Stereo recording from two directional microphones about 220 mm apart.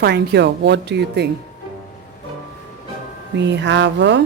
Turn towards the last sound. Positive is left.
turn(degrees=-55)  # may be behind; listen again after turning